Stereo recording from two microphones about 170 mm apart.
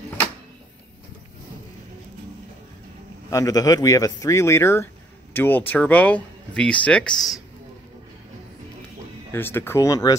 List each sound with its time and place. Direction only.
3.3 s speech: 20° left (ahead or behind); by 7.3 s 5° left (ahead or behind)
9.3 s speech: 15° left (ahead or behind)